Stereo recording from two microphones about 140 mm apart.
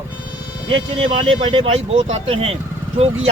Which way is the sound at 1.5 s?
40° right (ahead or behind).